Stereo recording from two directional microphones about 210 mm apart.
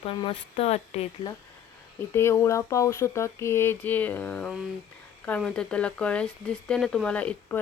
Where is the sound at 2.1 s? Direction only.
10° left (ahead or behind).